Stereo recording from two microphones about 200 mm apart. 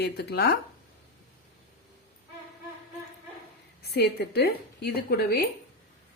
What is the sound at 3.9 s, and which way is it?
A woman's voice, 50° left (ahead or behind).